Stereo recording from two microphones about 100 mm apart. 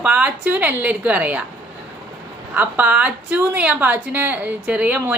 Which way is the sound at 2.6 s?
15° right (ahead or behind).